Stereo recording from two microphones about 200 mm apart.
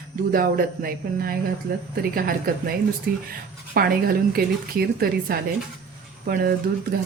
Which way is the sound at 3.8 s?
45° right (ahead or behind).